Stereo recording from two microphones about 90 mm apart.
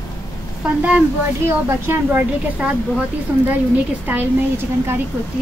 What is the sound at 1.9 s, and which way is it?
A woman's voice, 20° right (ahead or behind).